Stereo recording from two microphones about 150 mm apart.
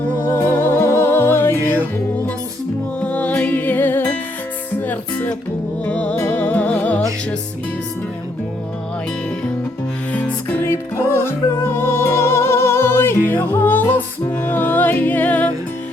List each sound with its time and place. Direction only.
0.3 s music: 15° left (ahead or behind)
3.0 s music: 10° left (ahead or behind)
10.1 s music: 10° left (ahead or behind)